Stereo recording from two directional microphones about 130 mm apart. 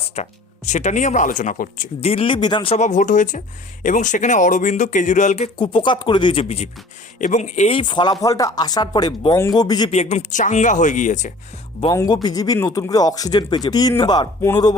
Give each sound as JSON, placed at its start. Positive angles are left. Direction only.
{"t": 0.2, "sound": "speech", "side_deg": 60}
{"t": 2.0, "sound": "speech", "side_deg": 50}
{"t": 2.7, "sound": "speech", "side_deg": 70}
{"t": 5.5, "sound": "speech", "side_deg": 40}
{"t": 7.2, "sound": "speech", "side_deg": 75}
{"t": 7.8, "sound": "speech", "side_deg": 35}
{"t": 9.9, "sound": "speech", "side_deg": 55}
{"t": 11.9, "sound": "speech", "side_deg": 30}